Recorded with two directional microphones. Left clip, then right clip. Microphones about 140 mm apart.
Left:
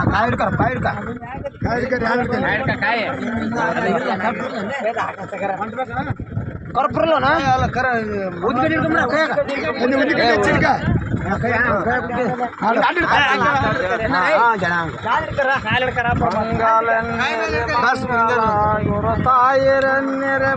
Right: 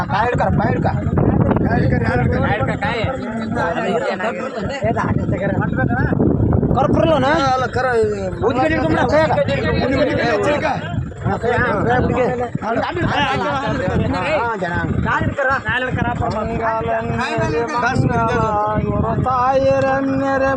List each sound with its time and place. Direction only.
1.7 s speech: 30° left (ahead or behind)
6.7 s a man's voice: 50° right (ahead or behind)
7.4 s speech: 35° right (ahead or behind)
10.1 s speech: 25° left (ahead or behind)
11.6 s a man's voice: 50° right (ahead or behind)
13.1 s speech: 30° right (ahead or behind)
19.3 s a sound: 10° right (ahead or behind)